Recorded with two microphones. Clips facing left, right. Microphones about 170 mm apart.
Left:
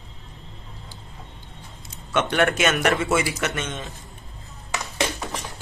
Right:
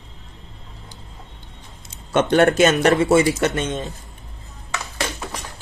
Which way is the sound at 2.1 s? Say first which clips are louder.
Right 6 dB; 35° right (ahead or behind).